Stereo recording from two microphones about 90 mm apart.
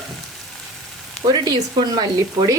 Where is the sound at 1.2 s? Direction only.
50° right (ahead or behind).